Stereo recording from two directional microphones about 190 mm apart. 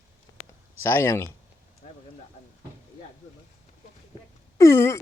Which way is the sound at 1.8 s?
40° left (ahead or behind).